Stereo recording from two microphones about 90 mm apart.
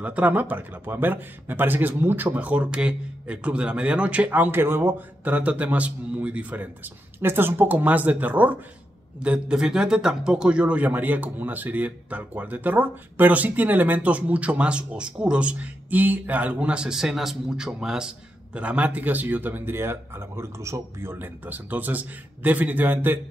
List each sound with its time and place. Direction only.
0.0 s a man's voice: 15° right (ahead or behind)